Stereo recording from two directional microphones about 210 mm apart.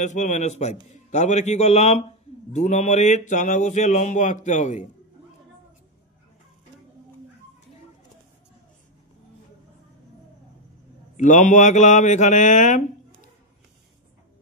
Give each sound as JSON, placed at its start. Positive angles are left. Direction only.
{"t": 0.0, "sound": "speech", "side_deg": 35}
{"t": 11.1, "sound": "speech", "side_deg": 35}